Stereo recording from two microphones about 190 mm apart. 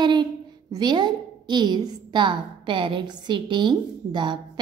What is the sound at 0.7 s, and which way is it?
A woman's voice, 20° right (ahead or behind).